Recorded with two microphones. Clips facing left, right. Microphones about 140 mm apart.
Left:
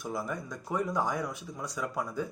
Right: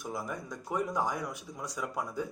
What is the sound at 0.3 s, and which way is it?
Speech, 20° right (ahead or behind).